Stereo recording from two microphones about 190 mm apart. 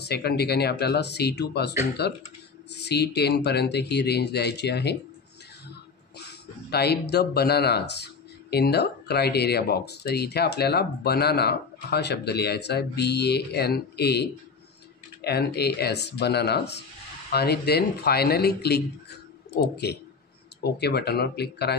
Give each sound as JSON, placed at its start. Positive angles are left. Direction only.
{"t": 0.0, "sound": "speech", "side_deg": 60}
{"t": 6.7, "sound": "speech", "side_deg": 60}